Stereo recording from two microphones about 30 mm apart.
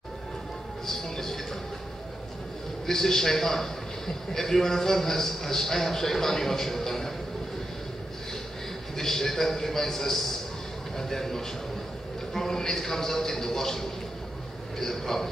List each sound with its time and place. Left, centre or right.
0.8 s vehicle: centre
2.9 s a man's voice: centre
8.9 s a man's voice: centre